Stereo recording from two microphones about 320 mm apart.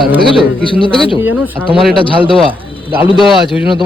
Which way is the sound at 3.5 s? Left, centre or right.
Centre.